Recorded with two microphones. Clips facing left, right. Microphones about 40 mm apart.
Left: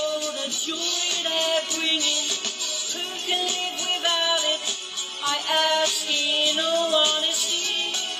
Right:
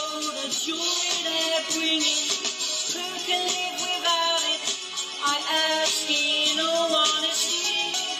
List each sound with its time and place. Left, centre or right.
1.5 s music: left
2.0 s music: left
4.0 s music: left